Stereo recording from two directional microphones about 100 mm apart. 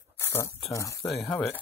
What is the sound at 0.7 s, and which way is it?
Speech, 30° left (ahead or behind).